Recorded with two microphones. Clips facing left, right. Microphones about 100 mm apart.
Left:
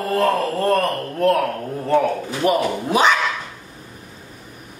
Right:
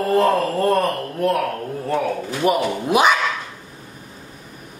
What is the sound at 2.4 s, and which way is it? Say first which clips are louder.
Mantra: even; 10° right (ahead or behind).